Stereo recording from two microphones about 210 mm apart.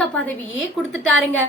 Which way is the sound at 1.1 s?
70° right (ahead or behind).